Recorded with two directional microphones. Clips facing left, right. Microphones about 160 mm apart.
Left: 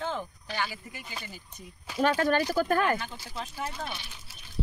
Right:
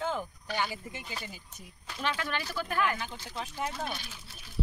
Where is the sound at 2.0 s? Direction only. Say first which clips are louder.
Left 9 dB; 45° left (ahead or behind).